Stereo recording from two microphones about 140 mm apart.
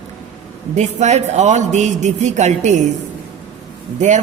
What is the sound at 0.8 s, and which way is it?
A man's voice, 55° right (ahead or behind).